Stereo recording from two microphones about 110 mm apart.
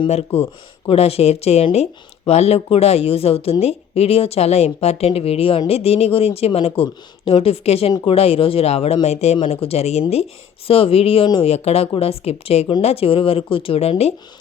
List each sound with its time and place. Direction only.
0.9 s speech: 65° left (ahead or behind)